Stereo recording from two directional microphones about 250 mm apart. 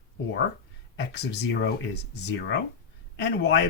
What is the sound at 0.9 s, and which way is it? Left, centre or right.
Speech, left.